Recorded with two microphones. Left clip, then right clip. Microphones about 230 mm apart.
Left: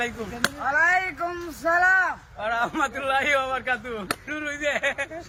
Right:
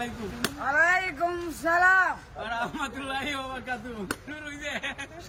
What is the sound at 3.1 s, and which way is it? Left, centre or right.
Speech, centre.